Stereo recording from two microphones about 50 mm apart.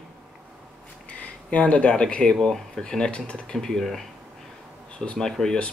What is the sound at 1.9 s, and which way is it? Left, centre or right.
Speech, centre.